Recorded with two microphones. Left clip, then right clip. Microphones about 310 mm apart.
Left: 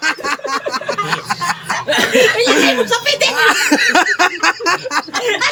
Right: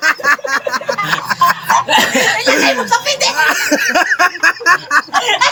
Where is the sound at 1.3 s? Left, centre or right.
Centre.